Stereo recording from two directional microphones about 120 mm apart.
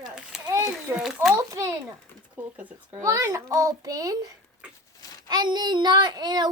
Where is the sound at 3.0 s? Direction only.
25° right (ahead or behind).